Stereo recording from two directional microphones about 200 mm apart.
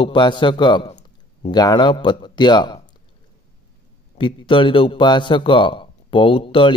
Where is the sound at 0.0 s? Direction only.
25° left (ahead or behind).